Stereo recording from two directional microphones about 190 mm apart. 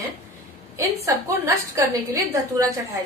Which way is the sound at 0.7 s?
15° right (ahead or behind).